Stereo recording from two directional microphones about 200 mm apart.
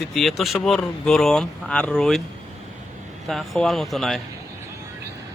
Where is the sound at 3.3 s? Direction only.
Centre (ahead or behind).